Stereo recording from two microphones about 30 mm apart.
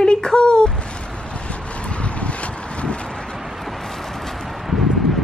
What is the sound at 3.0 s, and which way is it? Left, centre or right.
Vehicle, left.